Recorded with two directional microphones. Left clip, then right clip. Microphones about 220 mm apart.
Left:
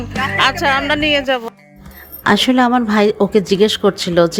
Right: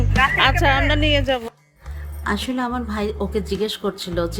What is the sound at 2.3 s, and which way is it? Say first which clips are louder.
A woman's voice: left 11 dB; 35° left (ahead or behind).